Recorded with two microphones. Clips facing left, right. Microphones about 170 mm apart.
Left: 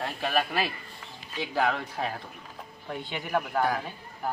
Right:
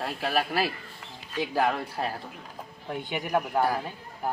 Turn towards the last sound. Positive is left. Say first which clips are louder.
# right 1 dB
turn(degrees=-5)  # may be behind; listen again after turning